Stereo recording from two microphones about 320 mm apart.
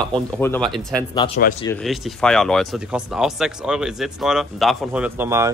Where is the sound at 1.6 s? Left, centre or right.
Centre.